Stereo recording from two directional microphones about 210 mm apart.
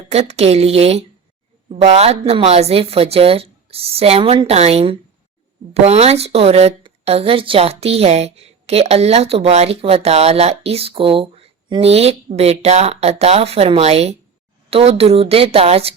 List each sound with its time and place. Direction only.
0.1 s a woman's voice: 30° right (ahead or behind)